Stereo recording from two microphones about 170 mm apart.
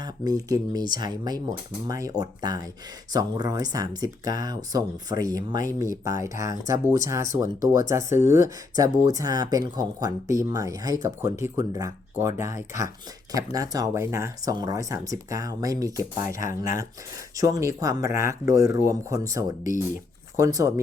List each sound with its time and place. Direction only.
0.0 s speech: 20° right (ahead or behind)
13.3 s speech: 20° right (ahead or behind)
16.4 s speech: 50° left (ahead or behind)
17.3 s speech: 20° right (ahead or behind)